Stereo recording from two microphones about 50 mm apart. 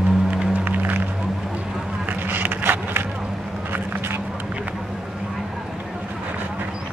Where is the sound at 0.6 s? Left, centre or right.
Right.